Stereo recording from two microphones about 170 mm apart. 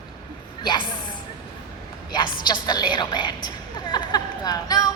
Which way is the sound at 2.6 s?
25° left (ahead or behind).